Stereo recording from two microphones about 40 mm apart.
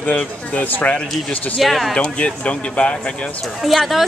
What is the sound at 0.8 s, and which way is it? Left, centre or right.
Speech, left.